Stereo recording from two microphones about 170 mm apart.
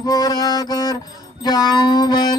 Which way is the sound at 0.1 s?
25° left (ahead or behind).